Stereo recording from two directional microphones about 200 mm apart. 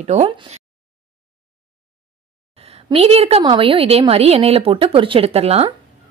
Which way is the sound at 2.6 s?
30° right (ahead or behind).